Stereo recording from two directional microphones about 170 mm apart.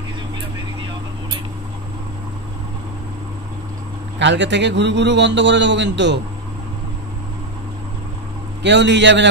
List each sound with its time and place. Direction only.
4.2 s a man's voice: 90° right
8.6 s a man's voice: 90° right